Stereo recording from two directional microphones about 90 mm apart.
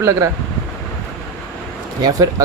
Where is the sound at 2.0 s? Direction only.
40° right (ahead or behind).